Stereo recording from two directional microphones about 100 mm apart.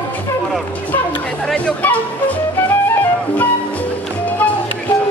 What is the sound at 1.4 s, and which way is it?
Music, 10° left (ahead or behind).